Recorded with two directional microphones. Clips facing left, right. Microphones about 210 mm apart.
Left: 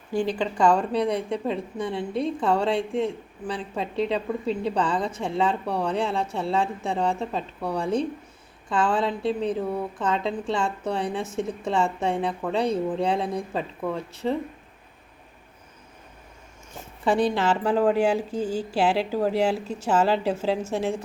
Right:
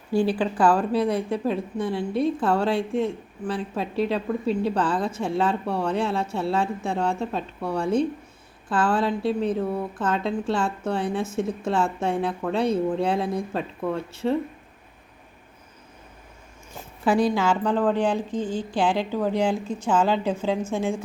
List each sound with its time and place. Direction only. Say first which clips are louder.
0.1 s speech: right 3 dB; 10° right (ahead or behind)
17.0 s speech: right 1 dB; centre (ahead or behind)